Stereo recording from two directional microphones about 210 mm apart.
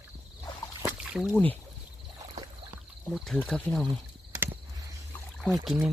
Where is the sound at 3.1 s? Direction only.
Centre (ahead or behind).